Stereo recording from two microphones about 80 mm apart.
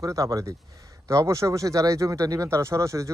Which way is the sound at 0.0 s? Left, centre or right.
Right.